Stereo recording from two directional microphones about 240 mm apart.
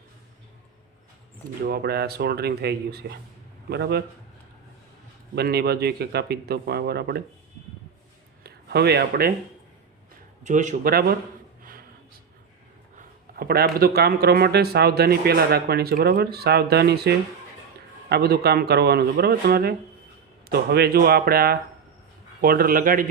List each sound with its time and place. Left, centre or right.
1.6 s a man's voice: right
5.3 s speech: right
8.4 s speech: right
10.4 s speech: right
11.6 s a sound: right
13.0 s speech: right